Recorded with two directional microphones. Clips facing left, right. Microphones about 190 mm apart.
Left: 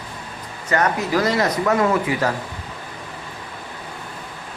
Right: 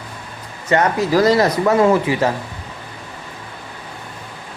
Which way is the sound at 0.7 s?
35° right (ahead or behind).